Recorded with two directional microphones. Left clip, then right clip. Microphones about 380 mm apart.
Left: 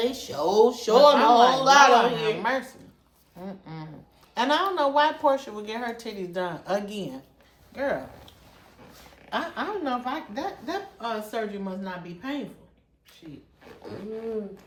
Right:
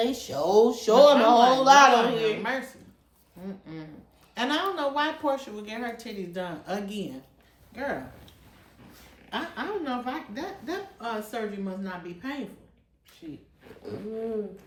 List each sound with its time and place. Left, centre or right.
0.0 s speech: centre
2.4 s a woman's voice: centre
9.3 s a woman's voice: centre